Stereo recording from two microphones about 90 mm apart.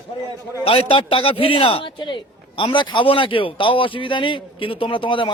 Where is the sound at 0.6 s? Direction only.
90° left.